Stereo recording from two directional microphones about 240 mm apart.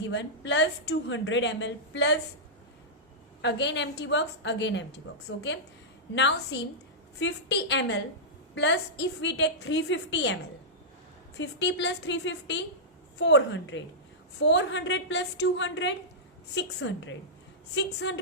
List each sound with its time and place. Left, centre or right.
0.1 s a woman's voice: left
3.4 s a woman's voice: left
11.3 s a woman's voice: left